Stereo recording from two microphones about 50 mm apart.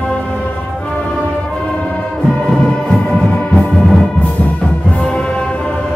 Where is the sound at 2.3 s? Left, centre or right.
Centre.